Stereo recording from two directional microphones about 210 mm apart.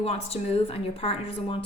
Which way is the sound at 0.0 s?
30° left (ahead or behind).